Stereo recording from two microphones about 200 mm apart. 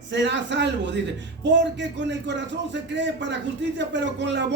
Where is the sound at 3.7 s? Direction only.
65° right (ahead or behind).